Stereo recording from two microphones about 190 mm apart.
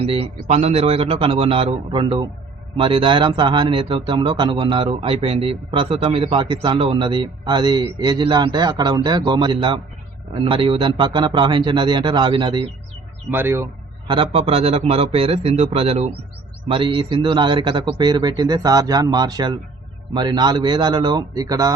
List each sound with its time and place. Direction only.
0.0 s speech: 30° right (ahead or behind)
13.3 s speech: 10° right (ahead or behind)
14.1 s a man's voice: 30° right (ahead or behind)